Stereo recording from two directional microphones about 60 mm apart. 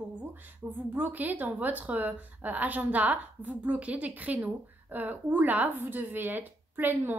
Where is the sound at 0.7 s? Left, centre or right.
Right.